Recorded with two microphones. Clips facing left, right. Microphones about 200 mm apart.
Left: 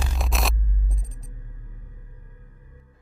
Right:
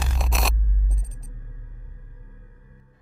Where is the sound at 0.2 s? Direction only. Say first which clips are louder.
Even; centre (ahead or behind).